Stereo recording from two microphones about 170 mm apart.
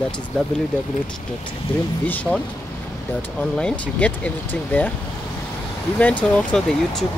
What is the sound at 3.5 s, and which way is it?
Speech, 5° left (ahead or behind).